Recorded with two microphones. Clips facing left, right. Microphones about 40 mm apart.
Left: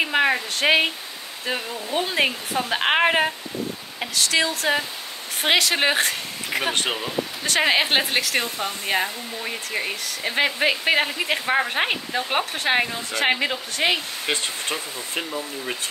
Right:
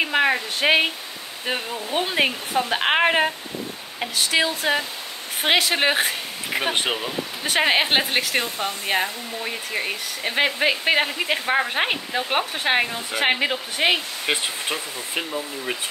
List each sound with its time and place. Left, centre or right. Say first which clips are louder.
0.0 s speech: even; centre
1.4 s speech: right 1 dB; centre
2.1 s speech: right 2 dB; centre
4.1 s speech: even; centre